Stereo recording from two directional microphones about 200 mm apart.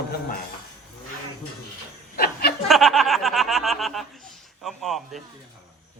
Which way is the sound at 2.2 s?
50° left (ahead or behind).